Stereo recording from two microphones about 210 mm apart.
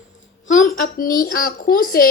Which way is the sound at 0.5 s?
40° left (ahead or behind).